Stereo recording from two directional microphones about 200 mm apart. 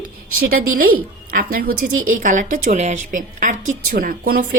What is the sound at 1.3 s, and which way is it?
A woman's voice, 50° right (ahead or behind).